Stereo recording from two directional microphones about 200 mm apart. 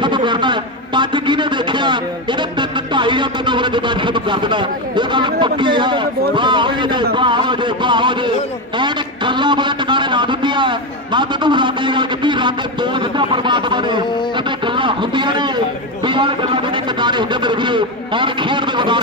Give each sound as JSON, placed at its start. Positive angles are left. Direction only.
{"t": 0.0, "sound": "a man's voice", "side_deg": -25}